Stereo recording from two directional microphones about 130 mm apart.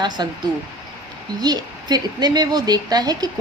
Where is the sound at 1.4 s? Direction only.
30° right (ahead or behind).